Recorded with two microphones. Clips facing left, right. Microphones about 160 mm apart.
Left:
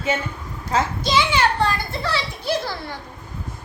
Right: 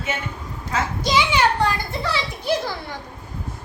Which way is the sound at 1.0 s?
15° right (ahead or behind).